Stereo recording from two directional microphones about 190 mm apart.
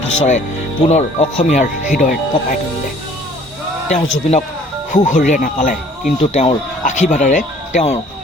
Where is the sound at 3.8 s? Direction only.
35° left (ahead or behind).